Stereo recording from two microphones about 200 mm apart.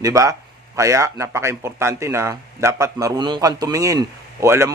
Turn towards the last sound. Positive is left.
turn(degrees=-15)  # may be behind; listen again after turning